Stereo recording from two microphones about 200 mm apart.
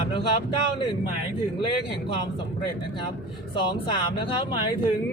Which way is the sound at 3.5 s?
25° left (ahead or behind).